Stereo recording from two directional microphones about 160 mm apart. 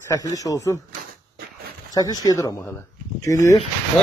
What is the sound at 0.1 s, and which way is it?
Speech, 20° left (ahead or behind).